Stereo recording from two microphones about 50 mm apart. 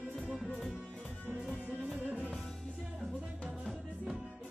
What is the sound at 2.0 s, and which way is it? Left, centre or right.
Music, right.